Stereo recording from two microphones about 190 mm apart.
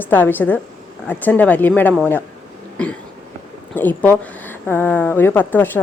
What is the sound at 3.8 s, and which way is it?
A woman's voice, 10° left (ahead or behind).